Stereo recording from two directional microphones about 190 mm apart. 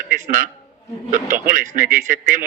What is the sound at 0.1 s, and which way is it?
A man's voice, 45° right (ahead or behind).